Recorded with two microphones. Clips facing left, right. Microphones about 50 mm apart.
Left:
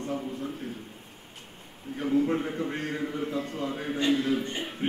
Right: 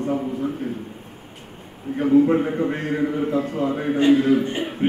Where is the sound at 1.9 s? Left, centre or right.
Right.